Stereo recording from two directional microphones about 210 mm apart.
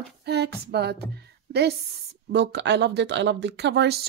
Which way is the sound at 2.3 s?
55° right (ahead or behind).